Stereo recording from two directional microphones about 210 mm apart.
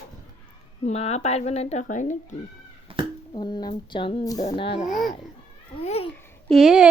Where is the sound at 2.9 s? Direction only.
25° right (ahead or behind).